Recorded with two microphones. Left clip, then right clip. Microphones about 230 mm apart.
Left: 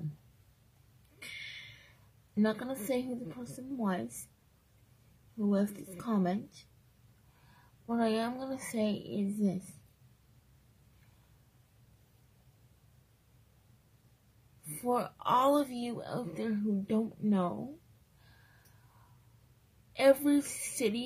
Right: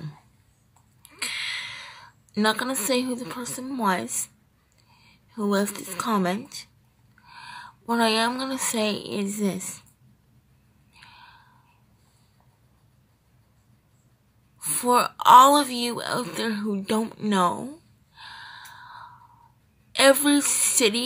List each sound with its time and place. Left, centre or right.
1.2 s a sound: centre
2.3 s a woman's voice: centre
5.5 s a woman's voice: centre
7.8 s a woman's voice: centre
14.8 s a woman's voice: centre
19.9 s a woman's voice: centre